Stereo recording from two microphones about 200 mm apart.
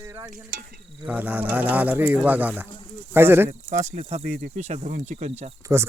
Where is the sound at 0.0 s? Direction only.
15° right (ahead or behind).